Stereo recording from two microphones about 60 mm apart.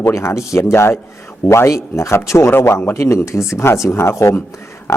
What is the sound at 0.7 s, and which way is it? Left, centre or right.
Speech, left.